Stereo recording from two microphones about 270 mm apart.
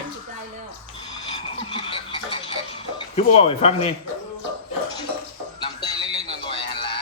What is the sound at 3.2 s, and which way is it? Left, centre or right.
Speech, left.